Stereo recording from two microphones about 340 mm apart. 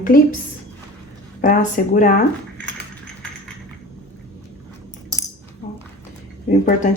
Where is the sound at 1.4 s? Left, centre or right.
Left.